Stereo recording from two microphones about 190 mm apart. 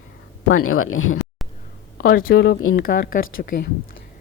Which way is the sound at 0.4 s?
90° left.